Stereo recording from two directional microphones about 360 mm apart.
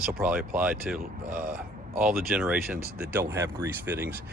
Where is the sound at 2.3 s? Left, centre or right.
Centre.